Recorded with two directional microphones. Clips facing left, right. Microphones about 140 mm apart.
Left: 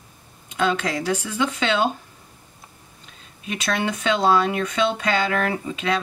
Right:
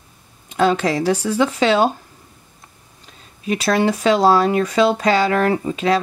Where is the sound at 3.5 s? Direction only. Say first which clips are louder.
Right 7 dB; 35° right (ahead or behind).